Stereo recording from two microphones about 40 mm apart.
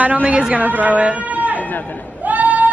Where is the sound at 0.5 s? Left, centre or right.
Right.